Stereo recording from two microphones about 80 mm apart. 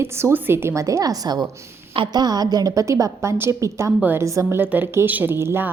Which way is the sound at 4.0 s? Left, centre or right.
Right.